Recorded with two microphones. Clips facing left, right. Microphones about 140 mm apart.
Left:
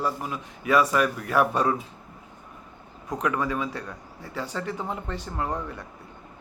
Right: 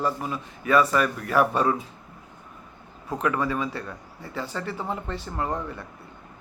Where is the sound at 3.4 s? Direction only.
10° left (ahead or behind).